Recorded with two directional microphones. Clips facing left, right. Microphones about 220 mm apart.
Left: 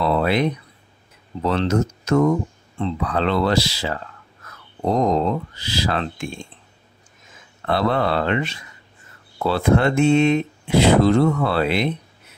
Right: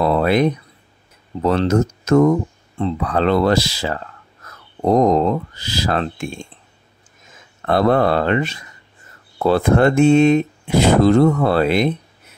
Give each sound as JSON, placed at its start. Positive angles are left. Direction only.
{"t": 0.0, "sound": "a sound", "side_deg": -45}
{"t": 1.4, "sound": "speech", "side_deg": -45}
{"t": 7.6, "sound": "speech", "side_deg": -45}